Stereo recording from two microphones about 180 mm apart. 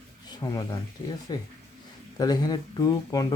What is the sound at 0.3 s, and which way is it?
Speech, 20° left (ahead or behind).